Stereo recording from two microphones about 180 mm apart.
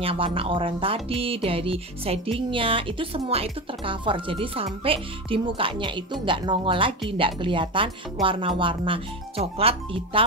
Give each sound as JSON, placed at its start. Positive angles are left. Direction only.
{"t": 0.0, "sound": "speech", "side_deg": -30}